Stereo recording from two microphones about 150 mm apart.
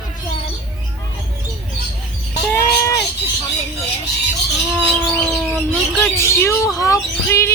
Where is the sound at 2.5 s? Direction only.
20° left (ahead or behind).